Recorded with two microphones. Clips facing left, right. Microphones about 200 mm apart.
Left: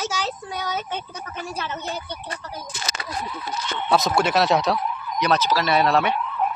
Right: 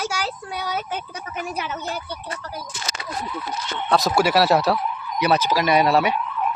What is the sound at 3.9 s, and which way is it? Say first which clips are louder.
Speech: right 1 dB; centre (ahead or behind).